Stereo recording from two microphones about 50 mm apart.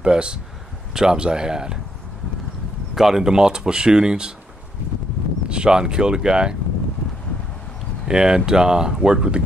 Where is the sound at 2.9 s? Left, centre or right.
Centre.